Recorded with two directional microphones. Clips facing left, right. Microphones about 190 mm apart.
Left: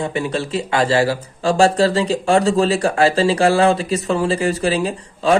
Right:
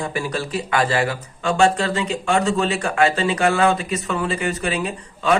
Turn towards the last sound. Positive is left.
turn(degrees=30)  # may be behind; listen again after turning